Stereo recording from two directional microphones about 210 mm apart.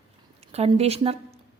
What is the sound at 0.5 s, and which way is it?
Speech, 30° right (ahead or behind).